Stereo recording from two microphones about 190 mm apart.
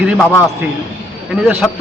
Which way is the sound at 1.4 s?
5° right (ahead or behind).